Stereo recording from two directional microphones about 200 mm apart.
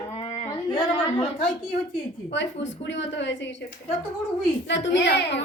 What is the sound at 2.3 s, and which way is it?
Speech, 65° left (ahead or behind).